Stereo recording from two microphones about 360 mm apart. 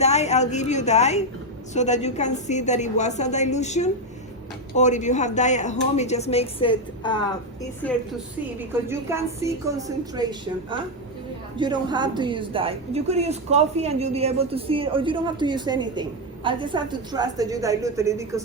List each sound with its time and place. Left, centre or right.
0.0 s speech: centre
8.9 s a woman's voice: centre